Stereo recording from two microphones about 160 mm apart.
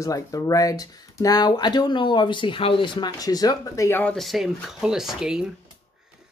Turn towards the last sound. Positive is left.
turn(degrees=-5)  # may be behind; listen again after turning